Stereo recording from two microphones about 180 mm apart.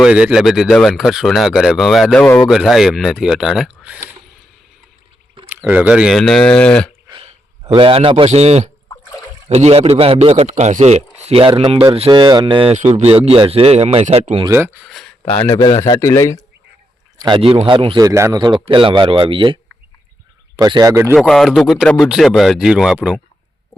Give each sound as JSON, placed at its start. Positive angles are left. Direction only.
{"t": 0.0, "sound": "speech", "side_deg": -5}
{"t": 5.5, "sound": "speech", "side_deg": -10}
{"t": 7.1, "sound": "a man's voice", "side_deg": -30}
{"t": 12.7, "sound": "a man's voice", "side_deg": -40}
{"t": 14.8, "sound": "a sound", "side_deg": 0}
{"t": 15.4, "sound": "a man's voice", "side_deg": 20}
{"t": 17.2, "sound": "a man's voice", "side_deg": -25}
{"t": 20.6, "sound": "a man's voice", "side_deg": -20}
{"t": 21.2, "sound": "speech", "side_deg": 0}